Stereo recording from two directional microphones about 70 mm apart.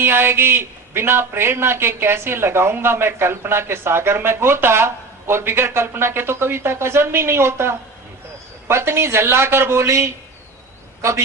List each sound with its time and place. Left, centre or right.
0.0 s a man's voice: right